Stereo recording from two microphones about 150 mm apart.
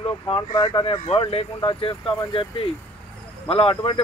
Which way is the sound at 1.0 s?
40° left (ahead or behind).